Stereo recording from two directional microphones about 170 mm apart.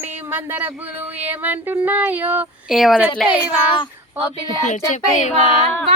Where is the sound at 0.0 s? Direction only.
10° right (ahead or behind).